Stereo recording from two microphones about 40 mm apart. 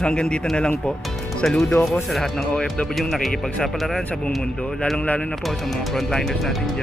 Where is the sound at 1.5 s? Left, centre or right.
Left.